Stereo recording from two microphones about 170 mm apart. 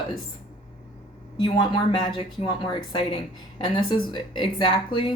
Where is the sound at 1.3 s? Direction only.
25° left (ahead or behind).